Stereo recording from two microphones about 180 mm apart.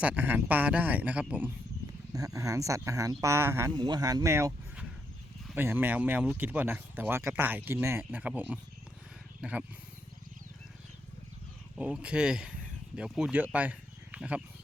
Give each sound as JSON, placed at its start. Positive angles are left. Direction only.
{"t": 0.0, "sound": "speech", "side_deg": -10}
{"t": 2.1, "sound": "speech", "side_deg": -20}
{"t": 11.8, "sound": "speech", "side_deg": -5}